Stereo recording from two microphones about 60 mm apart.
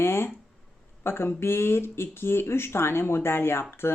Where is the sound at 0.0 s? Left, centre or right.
Left.